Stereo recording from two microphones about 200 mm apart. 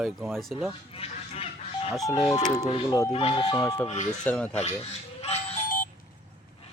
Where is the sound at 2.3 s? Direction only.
20° left (ahead or behind).